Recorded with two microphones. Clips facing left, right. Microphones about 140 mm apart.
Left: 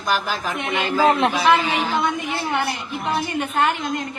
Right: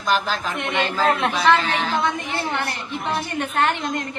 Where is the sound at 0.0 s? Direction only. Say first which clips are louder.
Right 1 dB; 5° left (ahead or behind).